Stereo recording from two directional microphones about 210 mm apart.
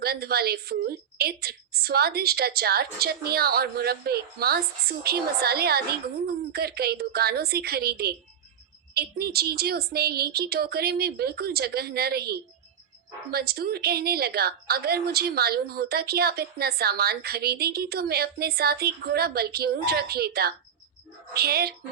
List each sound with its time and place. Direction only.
0.0 s a woman's voice: 50° right (ahead or behind)